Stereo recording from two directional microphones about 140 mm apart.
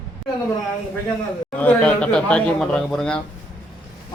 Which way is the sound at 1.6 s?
10° left (ahead or behind).